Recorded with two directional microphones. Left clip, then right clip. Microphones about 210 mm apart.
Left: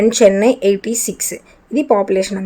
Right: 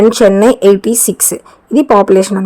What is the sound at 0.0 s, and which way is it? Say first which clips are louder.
Speech: right 4 dB; 20° right (ahead or behind).